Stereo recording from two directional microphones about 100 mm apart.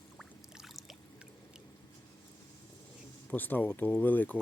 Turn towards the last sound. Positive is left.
turn(degrees=15)  # may be behind; listen again after turning